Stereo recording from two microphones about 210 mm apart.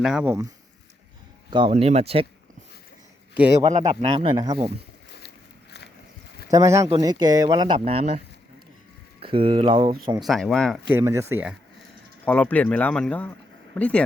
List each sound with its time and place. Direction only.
0.0 s speech: 5° right (ahead or behind)
1.5 s speech: 25° right (ahead or behind)
3.7 s speech: 30° right (ahead or behind)
6.5 s speech: 15° right (ahead or behind)
9.2 s speech: 25° right (ahead or behind)
10.2 s speech: centre (ahead or behind)
10.8 s speech: 10° right (ahead or behind)
12.2 s speech: 5° left (ahead or behind)